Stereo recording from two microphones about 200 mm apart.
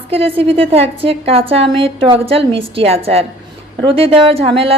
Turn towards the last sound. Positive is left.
turn(degrees=-25)  # may be behind; listen again after turning